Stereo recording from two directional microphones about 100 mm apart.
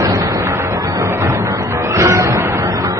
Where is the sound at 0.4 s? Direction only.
25° right (ahead or behind).